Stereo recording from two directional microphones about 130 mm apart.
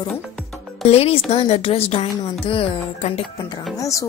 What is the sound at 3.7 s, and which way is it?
Speech, 25° left (ahead or behind).